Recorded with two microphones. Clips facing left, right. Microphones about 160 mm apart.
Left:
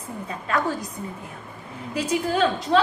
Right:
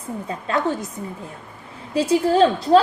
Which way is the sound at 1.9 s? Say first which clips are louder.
Right 6 dB; 30° right (ahead or behind).